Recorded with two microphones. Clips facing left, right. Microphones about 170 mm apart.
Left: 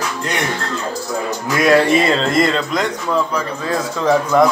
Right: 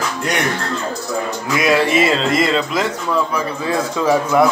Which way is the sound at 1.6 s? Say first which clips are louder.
Left 2 dB; centre (ahead or behind).